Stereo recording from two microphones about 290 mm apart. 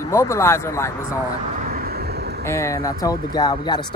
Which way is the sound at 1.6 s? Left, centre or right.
Right.